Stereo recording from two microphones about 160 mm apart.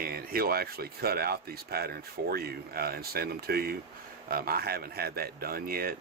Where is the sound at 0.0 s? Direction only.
70° right (ahead or behind).